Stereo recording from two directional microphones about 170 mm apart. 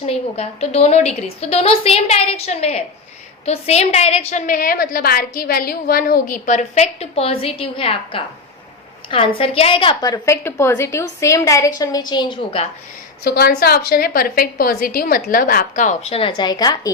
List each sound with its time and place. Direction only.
0.0 s a woman's voice: 35° left (ahead or behind)
13.2 s a woman's voice: 65° left (ahead or behind); by 16.9 s 25° left (ahead or behind)